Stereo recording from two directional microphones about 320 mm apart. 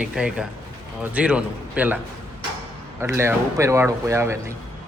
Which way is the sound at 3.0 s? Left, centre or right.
Centre.